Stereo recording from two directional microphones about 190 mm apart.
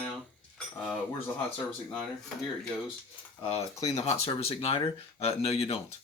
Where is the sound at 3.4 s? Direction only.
30° left (ahead or behind).